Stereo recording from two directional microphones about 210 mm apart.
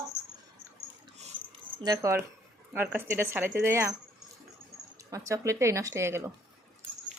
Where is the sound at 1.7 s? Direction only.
15° right (ahead or behind).